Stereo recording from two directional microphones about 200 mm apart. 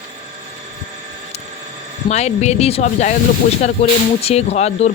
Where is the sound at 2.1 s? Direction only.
35° left (ahead or behind).